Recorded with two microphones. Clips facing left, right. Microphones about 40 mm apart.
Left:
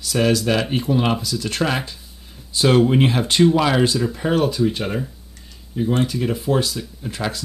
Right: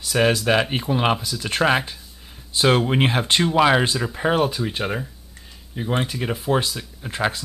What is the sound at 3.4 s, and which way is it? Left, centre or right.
Speech, centre.